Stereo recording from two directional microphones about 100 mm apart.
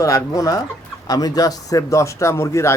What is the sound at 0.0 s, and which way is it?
A man's voice, 35° left (ahead or behind).